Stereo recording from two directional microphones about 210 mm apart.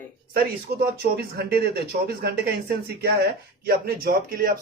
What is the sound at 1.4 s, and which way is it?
Speech, 50° right (ahead or behind).